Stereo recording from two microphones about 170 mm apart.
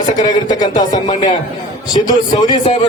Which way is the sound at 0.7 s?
50° left (ahead or behind).